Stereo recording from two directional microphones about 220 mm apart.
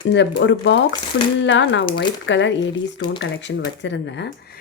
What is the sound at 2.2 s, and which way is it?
Speech, 55° left (ahead or behind).